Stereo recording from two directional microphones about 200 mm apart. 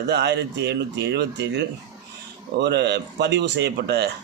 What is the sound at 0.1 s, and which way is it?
Speech, 60° right (ahead or behind).